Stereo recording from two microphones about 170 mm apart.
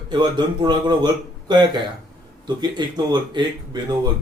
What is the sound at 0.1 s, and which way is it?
Speech, 25° right (ahead or behind).